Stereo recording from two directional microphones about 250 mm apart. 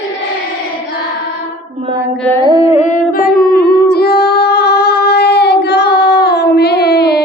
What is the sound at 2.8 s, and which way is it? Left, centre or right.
Female singing, left.